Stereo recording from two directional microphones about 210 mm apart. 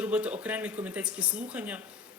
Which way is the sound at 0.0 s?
5° right (ahead or behind).